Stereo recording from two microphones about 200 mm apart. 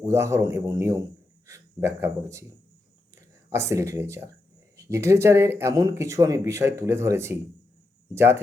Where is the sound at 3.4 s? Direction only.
15° right (ahead or behind).